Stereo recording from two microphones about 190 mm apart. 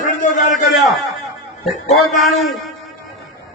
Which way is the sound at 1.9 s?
Centre (ahead or behind).